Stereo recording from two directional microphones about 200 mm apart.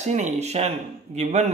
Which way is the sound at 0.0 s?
35° right (ahead or behind).